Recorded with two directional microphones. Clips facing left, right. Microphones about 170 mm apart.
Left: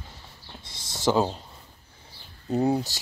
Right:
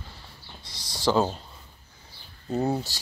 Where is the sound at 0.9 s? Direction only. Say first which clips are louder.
Even; 15° left (ahead or behind).